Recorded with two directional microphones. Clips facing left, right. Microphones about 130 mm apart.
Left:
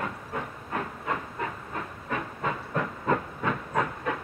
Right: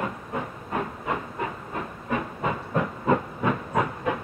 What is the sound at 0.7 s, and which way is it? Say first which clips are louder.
Hiss: right 3 dB; 15° right (ahead or behind).